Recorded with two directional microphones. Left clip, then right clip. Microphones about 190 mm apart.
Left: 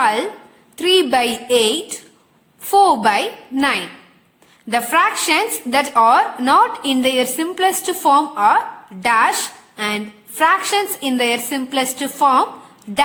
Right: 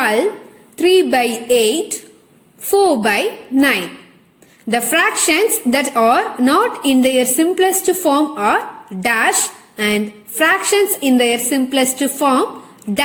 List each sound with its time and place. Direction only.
0.0 s a woman's voice: centre (ahead or behind)
12.9 s a woman's voice: 40° right (ahead or behind)